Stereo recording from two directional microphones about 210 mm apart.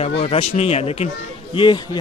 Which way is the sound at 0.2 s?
30° left (ahead or behind).